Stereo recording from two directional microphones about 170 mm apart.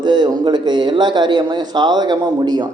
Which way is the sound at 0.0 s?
25° right (ahead or behind).